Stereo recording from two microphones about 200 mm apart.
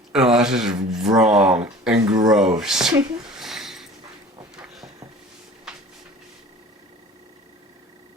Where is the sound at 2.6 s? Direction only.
Centre (ahead or behind).